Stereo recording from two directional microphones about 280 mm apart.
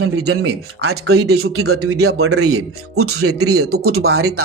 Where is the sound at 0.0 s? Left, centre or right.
Right.